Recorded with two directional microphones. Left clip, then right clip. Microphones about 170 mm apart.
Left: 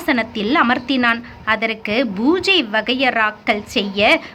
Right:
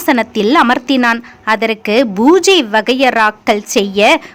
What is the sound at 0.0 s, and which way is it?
A woman's voice, 40° right (ahead or behind).